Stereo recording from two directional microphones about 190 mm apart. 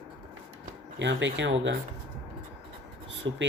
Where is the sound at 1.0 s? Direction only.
75° right (ahead or behind).